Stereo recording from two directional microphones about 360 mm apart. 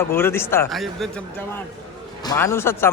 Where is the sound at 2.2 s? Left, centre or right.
Centre.